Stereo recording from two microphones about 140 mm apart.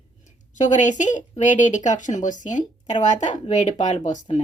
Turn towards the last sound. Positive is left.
turn(degrees=60)  # may be behind; listen again after turning